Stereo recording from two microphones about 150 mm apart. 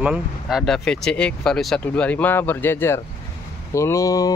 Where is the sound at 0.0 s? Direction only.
5° right (ahead or behind).